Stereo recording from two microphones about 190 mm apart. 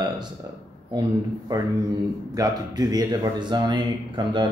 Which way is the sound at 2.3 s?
20° right (ahead or behind).